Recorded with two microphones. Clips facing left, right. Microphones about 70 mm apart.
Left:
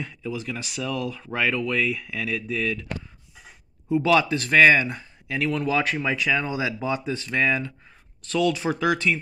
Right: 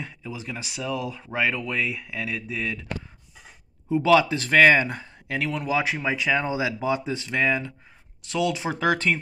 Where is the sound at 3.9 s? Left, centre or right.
Right.